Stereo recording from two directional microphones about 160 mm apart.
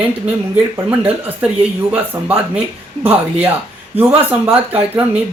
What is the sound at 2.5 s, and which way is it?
Speech, 10° right (ahead or behind).